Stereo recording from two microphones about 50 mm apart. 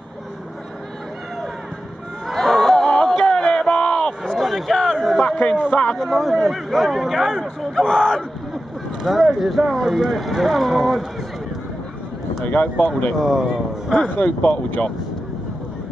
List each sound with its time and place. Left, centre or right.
2.2 s chatter: centre
3.3 s a sound: centre
4.3 s a sound: centre
5.9 s speech: centre
9.0 s speech: centre
12.4 s speech: left
13.2 s speech: centre
14.1 s speech: left